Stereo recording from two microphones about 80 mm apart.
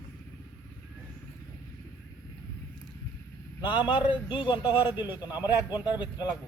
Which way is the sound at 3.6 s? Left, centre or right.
Left.